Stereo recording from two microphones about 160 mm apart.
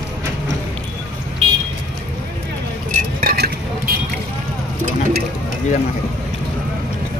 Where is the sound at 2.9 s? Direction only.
60° right (ahead or behind).